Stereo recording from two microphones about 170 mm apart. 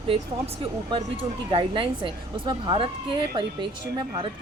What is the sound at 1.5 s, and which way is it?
A woman's voice, 30° right (ahead or behind).